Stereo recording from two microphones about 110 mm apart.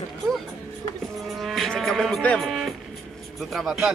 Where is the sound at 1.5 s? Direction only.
Centre (ahead or behind).